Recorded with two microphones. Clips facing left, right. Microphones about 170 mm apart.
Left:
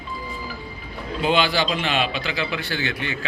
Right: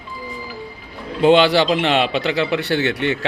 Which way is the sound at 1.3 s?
70° right (ahead or behind).